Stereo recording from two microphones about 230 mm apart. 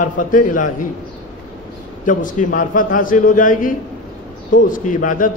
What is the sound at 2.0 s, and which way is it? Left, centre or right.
A man's voice, left.